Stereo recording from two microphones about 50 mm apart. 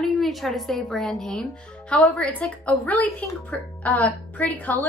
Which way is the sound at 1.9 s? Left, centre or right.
Left.